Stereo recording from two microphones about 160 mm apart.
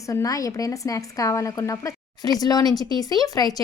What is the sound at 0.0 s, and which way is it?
A woman's voice, 20° left (ahead or behind).